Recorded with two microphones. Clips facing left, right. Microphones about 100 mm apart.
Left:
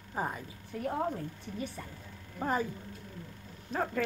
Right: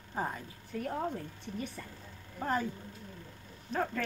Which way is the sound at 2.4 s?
10° left (ahead or behind).